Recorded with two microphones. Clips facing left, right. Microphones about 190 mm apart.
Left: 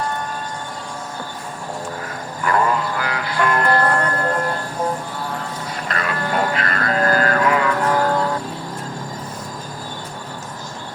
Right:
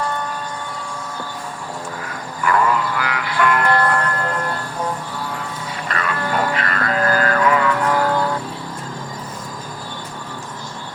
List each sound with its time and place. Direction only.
2.4 s music: 30° left (ahead or behind)
5.9 s music: 35° left (ahead or behind)